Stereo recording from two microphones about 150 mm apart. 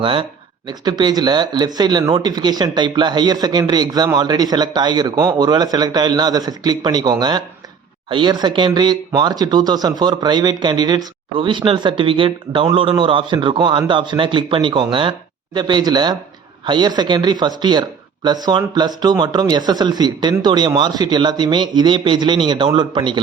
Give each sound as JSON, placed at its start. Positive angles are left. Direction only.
{"t": 0.0, "sound": "speech", "side_deg": -35}